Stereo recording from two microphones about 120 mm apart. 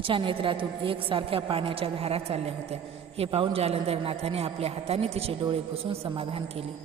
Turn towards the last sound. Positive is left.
turn(degrees=-55)  # may be behind; listen again after turning